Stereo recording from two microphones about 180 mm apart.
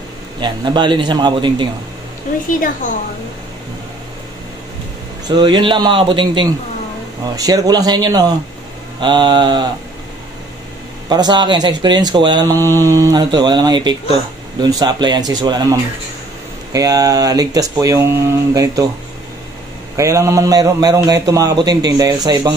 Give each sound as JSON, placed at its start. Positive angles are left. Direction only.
{"t": 0.4, "sound": "speech", "side_deg": -25}
{"t": 5.3, "sound": "speech", "side_deg": -25}
{"t": 11.1, "sound": "speech", "side_deg": -25}
{"t": 20.0, "sound": "speech", "side_deg": -15}